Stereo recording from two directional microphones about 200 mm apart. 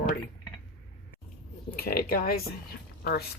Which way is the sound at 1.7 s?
50° left (ahead or behind).